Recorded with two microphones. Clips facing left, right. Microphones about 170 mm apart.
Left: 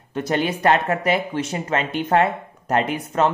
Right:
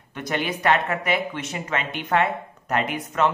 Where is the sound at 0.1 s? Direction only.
35° left (ahead or behind).